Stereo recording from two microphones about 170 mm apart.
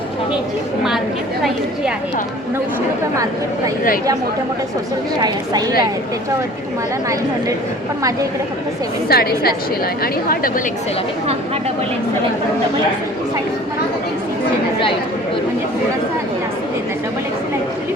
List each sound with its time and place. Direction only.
9.0 s a woman's voice: 65° left (ahead or behind)